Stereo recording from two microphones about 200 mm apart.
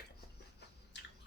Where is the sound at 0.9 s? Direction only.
60° left (ahead or behind).